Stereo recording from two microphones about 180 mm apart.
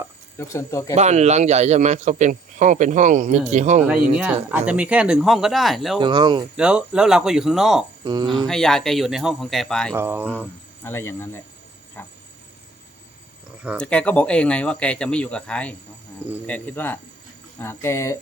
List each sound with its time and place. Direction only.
0.3 s speech: 15° left (ahead or behind)
0.9 s speech: 40° right (ahead or behind)
4.1 s a sound: 10° right (ahead or behind)
4.5 s speech: 5° right (ahead or behind)
6.0 s speech: 25° right (ahead or behind)
6.6 s speech: 5° right (ahead or behind)
8.0 s speech: 25° right (ahead or behind)
8.4 s speech: 5° left (ahead or behind)
9.9 s a sound: 15° right (ahead or behind)
10.8 s speech: 15° left (ahead or behind)
13.7 s speech: 5° left (ahead or behind)